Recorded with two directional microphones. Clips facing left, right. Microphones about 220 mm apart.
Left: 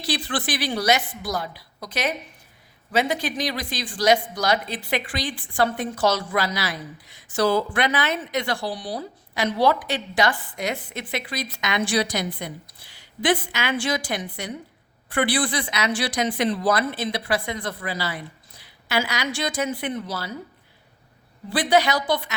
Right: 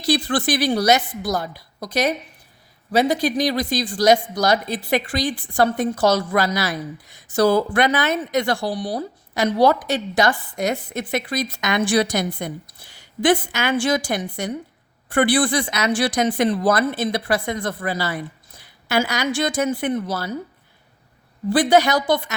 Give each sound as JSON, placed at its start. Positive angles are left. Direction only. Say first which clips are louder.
{"t": 0.0, "sound": "speech", "louder": "right 7 dB", "side_deg": -45}
{"t": 21.5, "sound": "speech", "louder": "right 4 dB", "side_deg": -45}